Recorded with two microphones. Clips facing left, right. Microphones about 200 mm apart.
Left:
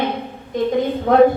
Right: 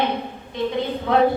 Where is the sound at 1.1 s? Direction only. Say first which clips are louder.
Left 6 dB; 45° left (ahead or behind).